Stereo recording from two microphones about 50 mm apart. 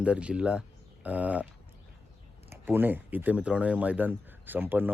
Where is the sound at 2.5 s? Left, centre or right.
Right.